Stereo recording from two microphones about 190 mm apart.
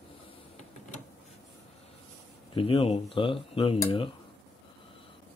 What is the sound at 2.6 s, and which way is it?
Speech, 30° left (ahead or behind).